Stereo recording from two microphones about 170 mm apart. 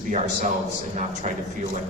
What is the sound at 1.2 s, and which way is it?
Speech, 45° right (ahead or behind).